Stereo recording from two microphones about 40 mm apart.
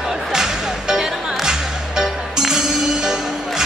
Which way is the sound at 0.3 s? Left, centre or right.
Centre.